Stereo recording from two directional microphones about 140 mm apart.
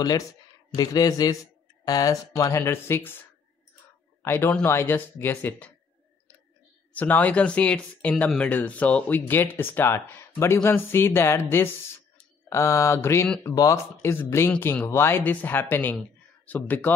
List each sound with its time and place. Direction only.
0.7 s speech: 25° left (ahead or behind)
4.2 s a man's voice: 15° left (ahead or behind)
6.9 s speech: 10° left (ahead or behind)